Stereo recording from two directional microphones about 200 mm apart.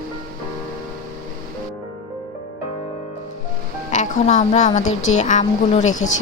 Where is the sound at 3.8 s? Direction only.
35° left (ahead or behind).